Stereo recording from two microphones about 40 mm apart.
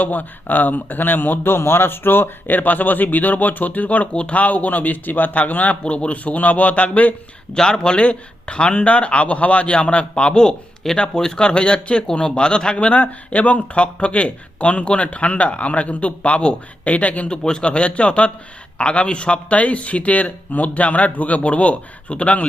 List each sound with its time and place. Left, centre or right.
0.0 s speech: left
1.5 s speech: left
2.5 s speech: left
5.8 s speech: left
7.5 s speech: centre; by 17.2 s left
17.2 s speech: left